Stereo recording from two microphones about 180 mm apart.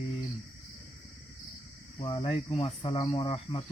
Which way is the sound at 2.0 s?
25° left (ahead or behind).